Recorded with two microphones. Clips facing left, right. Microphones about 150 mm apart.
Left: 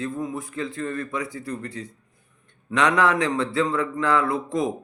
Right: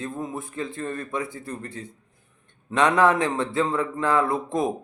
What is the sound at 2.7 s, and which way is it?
A man's voice, 25° right (ahead or behind).